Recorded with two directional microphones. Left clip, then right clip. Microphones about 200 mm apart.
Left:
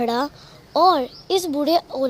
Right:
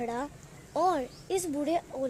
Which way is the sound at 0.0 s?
25° left (ahead or behind).